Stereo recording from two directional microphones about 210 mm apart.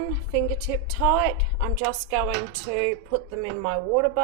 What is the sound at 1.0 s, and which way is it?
Speech, 10° right (ahead or behind).